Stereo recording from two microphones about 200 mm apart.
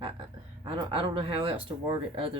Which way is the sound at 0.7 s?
25° right (ahead or behind).